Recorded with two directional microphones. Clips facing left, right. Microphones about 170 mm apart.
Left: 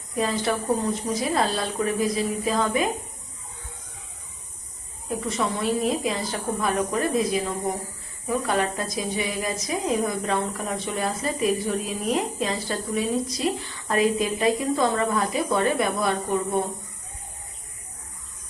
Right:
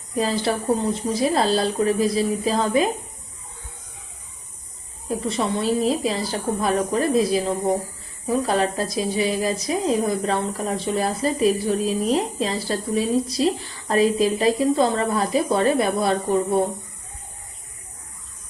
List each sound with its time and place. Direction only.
0.2 s a woman's voice: 30° right (ahead or behind)
5.2 s a woman's voice: 30° right (ahead or behind)